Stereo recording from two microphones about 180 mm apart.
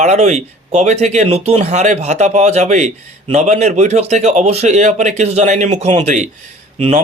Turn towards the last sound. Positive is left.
turn(degrees=-40)  # may be behind; listen again after turning